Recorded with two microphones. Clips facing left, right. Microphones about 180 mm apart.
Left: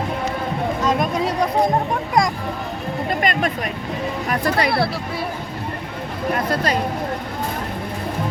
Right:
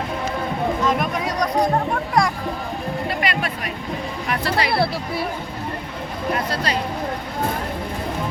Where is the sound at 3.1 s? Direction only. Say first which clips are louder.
Left 6 dB; 45° left (ahead or behind).